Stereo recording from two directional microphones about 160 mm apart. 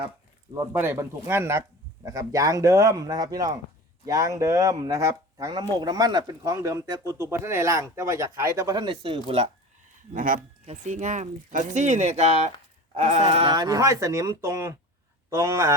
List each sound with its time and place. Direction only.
0.5 s speech: 15° right (ahead or behind); by 9.5 s 35° right (ahead or behind)
10.1 s speech: 55° right (ahead or behind)
10.7 s speech: 45° right (ahead or behind)
13.5 s speech: 25° right (ahead or behind)